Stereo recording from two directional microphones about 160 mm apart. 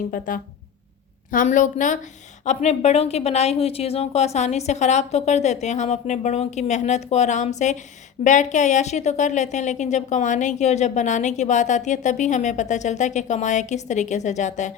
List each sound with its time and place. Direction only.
0.1 s a woman's voice: 60° left (ahead or behind)